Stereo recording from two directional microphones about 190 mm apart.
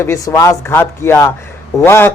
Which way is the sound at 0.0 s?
15° left (ahead or behind).